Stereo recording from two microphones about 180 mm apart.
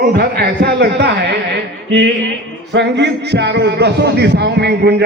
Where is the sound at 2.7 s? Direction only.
75° right (ahead or behind).